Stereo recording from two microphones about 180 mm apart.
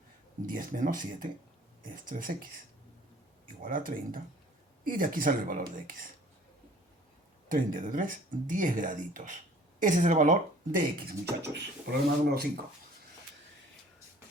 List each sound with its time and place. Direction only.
0.5 s speech: 50° right (ahead or behind)
3.6 s speech: 50° right (ahead or behind)
7.4 s speech: 50° right (ahead or behind)